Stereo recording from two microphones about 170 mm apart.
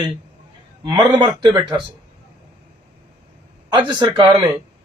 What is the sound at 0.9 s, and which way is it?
Speech, 25° right (ahead or behind).